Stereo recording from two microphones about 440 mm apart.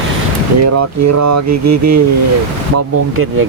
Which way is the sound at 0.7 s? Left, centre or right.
Right.